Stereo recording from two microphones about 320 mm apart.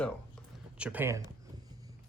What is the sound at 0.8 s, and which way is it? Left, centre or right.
Speech, centre.